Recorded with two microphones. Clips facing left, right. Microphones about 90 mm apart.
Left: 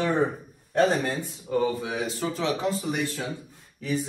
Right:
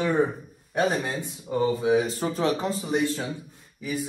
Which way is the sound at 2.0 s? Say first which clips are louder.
Right 2 dB; 40° right (ahead or behind).